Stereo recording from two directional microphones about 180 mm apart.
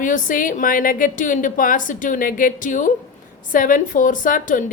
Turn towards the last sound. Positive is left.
turn(degrees=50)  # may be behind; listen again after turning